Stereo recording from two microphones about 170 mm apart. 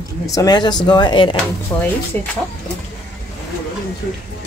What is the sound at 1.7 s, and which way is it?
Speech, 15° left (ahead or behind).